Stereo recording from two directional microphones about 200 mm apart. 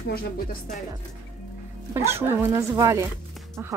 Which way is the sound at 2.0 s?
10° right (ahead or behind).